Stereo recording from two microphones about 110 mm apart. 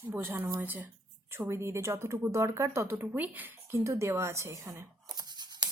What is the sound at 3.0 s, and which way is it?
A woman's voice, 15° right (ahead or behind).